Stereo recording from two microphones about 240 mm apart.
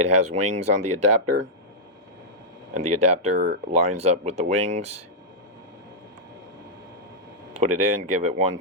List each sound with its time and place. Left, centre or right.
0.1 s speech: right
2.7 s speech: right
7.6 s speech: right